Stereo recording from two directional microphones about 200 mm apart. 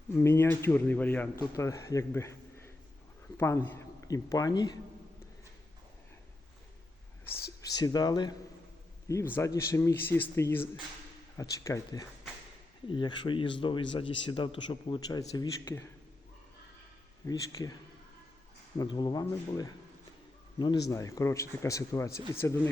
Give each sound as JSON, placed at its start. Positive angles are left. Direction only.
{"t": 0.2, "sound": "a man's voice", "side_deg": 10}
{"t": 7.7, "sound": "a man's voice", "side_deg": 20}
{"t": 17.2, "sound": "speech", "side_deg": 20}
{"t": 18.8, "sound": "a man's voice", "side_deg": 20}